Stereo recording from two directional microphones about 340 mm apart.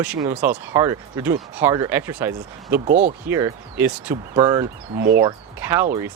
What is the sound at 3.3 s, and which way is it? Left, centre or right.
Speech, centre.